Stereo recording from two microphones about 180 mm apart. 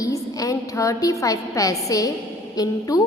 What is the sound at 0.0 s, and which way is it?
A woman's voice, 20° left (ahead or behind).